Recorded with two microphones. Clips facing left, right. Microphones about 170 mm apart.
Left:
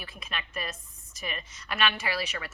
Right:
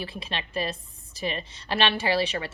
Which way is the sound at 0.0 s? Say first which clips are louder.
Right 6 dB; 30° right (ahead or behind).